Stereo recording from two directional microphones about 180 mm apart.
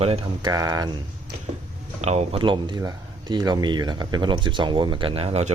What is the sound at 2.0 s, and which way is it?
Speech, 35° right (ahead or behind).